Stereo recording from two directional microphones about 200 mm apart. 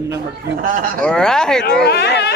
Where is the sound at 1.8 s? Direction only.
55° left (ahead or behind).